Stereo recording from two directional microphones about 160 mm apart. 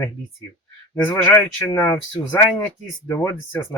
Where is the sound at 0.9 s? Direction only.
15° left (ahead or behind).